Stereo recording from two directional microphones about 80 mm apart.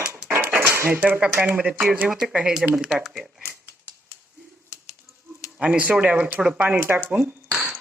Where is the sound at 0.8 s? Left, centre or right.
Centre.